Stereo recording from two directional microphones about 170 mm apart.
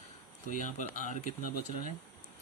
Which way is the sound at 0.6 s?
45° left (ahead or behind).